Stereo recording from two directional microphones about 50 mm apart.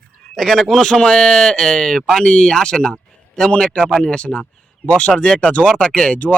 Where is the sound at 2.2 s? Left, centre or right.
Centre.